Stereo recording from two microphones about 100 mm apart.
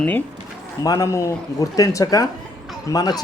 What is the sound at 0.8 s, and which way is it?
Speech, 35° left (ahead or behind).